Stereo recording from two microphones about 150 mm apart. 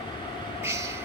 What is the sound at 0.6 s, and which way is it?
Train, 20° right (ahead or behind).